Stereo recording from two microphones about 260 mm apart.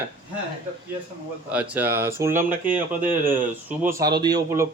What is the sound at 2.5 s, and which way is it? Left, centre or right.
Speech, right.